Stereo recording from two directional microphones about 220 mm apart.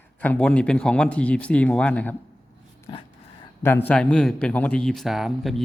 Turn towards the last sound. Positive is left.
turn(degrees=0)  # may be behind; listen again after turning